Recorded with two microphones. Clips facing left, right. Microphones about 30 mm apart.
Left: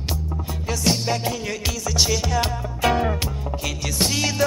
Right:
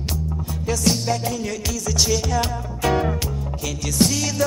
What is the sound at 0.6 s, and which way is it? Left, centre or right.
Music, centre.